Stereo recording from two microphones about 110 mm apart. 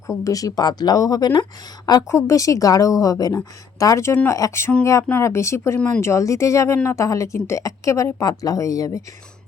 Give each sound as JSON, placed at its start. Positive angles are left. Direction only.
{"t": 0.1, "sound": "a woman's voice", "side_deg": 30}